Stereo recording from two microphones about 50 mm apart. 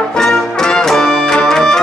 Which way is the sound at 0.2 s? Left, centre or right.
Centre.